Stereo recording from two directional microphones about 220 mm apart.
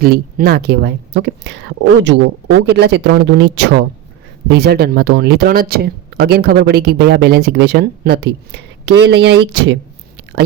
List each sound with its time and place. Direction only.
0.0 s speech: 45° right (ahead or behind)